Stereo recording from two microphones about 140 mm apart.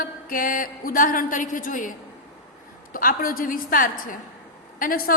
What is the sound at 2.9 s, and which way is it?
A man's voice, 90° left.